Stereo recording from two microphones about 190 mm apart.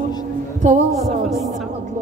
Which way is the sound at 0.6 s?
40° right (ahead or behind).